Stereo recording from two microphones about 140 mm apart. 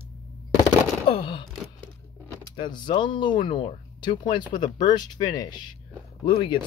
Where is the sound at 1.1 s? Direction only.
40° left (ahead or behind).